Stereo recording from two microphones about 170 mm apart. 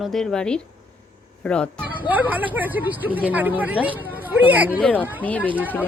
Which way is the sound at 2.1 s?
10° right (ahead or behind).